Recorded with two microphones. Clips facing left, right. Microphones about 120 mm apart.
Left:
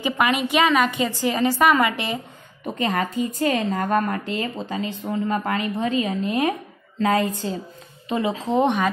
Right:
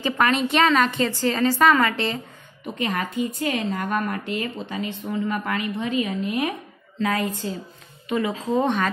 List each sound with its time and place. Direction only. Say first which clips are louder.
0.0 s a woman's voice: even; 10° left (ahead or behind)
2.6 s a woman's voice: left 3 dB; 40° left (ahead or behind)